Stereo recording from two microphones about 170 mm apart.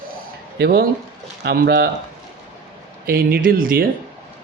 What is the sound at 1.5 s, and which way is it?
Speech, 80° right.